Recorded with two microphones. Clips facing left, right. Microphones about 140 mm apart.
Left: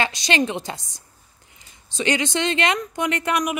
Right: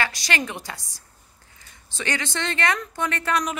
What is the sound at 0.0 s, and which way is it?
A woman's voice, 20° left (ahead or behind).